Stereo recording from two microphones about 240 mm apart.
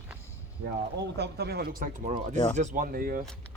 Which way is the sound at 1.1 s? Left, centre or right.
Right.